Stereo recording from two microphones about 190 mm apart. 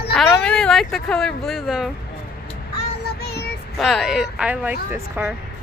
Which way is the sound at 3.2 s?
60° left (ahead or behind).